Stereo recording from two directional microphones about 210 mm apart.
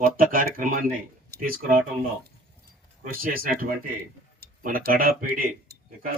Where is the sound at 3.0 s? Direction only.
45° right (ahead or behind).